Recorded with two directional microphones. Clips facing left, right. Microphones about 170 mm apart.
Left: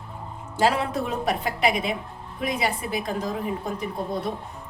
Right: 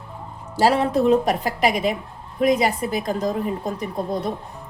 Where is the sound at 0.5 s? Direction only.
40° right (ahead or behind).